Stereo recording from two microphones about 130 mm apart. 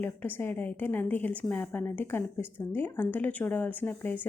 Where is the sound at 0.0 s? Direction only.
15° left (ahead or behind).